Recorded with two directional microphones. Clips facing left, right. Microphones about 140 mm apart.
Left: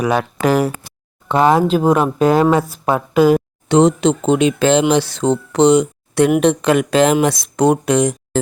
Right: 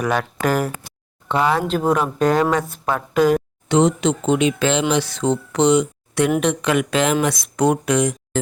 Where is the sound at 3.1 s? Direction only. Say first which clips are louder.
Left 4 dB; 10° left (ahead or behind).